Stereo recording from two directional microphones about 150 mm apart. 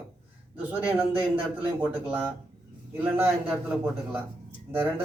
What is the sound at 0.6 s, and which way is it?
Speech, 10° right (ahead or behind).